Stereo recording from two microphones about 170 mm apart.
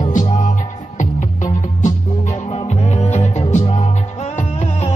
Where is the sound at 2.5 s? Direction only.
35° left (ahead or behind).